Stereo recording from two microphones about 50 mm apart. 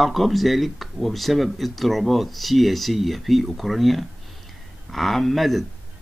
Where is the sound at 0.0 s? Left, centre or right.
Centre.